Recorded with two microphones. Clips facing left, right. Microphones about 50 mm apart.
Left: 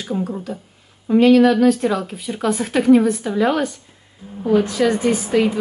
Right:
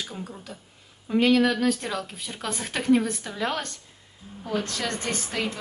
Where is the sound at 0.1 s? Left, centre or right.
Centre.